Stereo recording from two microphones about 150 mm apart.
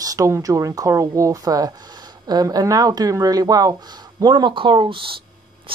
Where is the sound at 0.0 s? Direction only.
25° right (ahead or behind).